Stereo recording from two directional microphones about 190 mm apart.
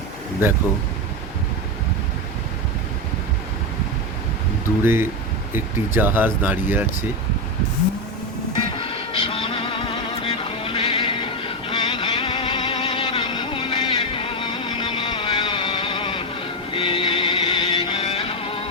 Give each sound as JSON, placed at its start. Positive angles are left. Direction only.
{"t": 4.8, "sound": "speech", "side_deg": -10}
{"t": 8.7, "sound": "music", "side_deg": 30}